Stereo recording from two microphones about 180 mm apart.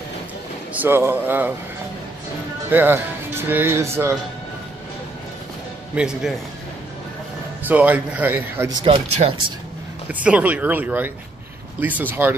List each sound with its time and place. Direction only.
0.7 s speech: 10° right (ahead or behind)
2.7 s speech: 10° right (ahead or behind)
5.9 s a man's voice: 5° right (ahead or behind)
7.6 s speech: 10° right (ahead or behind)
8.6 s speech: 25° right (ahead or behind)
10.2 s speech: 5° right (ahead or behind)